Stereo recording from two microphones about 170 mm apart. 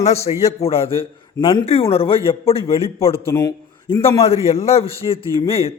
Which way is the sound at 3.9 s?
30° left (ahead or behind).